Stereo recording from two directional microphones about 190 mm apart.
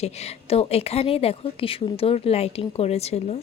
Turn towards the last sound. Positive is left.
turn(degrees=35)  # may be behind; listen again after turning